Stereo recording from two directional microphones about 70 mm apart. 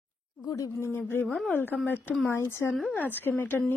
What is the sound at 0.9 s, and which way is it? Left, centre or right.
A woman's voice, left.